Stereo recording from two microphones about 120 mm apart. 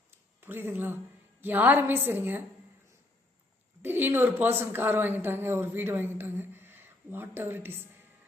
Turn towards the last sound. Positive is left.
turn(degrees=-20)  # may be behind; listen again after turning